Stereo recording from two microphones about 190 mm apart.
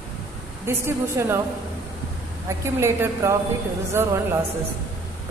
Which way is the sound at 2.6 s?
15° right (ahead or behind).